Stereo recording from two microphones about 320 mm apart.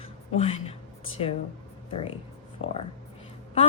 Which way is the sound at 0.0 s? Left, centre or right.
Centre.